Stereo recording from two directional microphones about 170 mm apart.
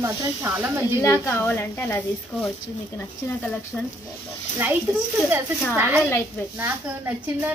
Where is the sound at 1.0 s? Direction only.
20° left (ahead or behind).